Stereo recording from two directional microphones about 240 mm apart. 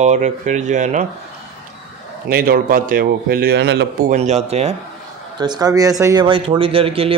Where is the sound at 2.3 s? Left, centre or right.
Right.